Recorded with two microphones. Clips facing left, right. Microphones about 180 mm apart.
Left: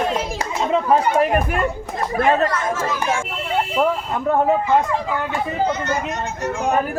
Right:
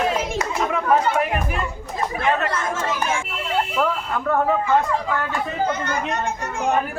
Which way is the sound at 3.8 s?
25° left (ahead or behind).